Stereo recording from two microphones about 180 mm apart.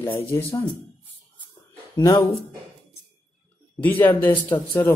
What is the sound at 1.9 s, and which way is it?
Speech, 20° left (ahead or behind).